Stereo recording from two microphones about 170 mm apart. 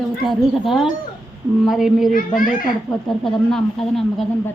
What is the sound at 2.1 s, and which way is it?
Speech, 55° left (ahead or behind).